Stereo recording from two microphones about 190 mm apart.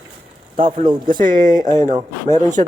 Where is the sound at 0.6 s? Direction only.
25° right (ahead or behind).